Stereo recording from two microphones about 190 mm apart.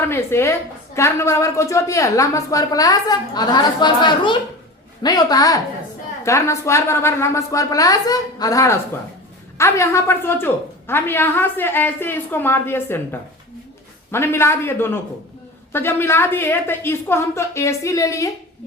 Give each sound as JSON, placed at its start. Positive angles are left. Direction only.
{"t": 0.1, "sound": "a woman's voice", "side_deg": 10}